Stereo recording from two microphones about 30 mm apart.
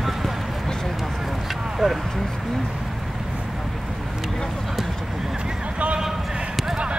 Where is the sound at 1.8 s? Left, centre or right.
Centre.